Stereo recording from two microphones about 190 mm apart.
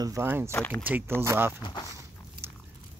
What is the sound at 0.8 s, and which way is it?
Speech, 10° right (ahead or behind).